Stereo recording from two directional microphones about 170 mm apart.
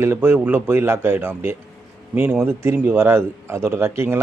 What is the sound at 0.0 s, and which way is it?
Speech, 15° right (ahead or behind).